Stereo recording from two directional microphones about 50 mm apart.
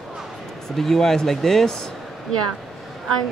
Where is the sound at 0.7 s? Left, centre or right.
Centre.